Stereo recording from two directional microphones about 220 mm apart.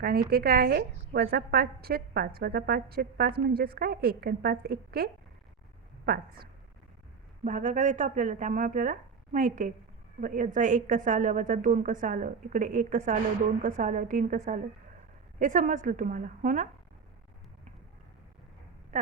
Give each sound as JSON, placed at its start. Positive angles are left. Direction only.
{"t": 0.0, "sound": "a woman's voice", "side_deg": -45}
{"t": 7.4, "sound": "a woman's voice", "side_deg": -35}